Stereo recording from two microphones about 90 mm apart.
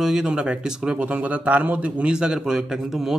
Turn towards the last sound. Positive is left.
turn(degrees=-5)  # may be behind; listen again after turning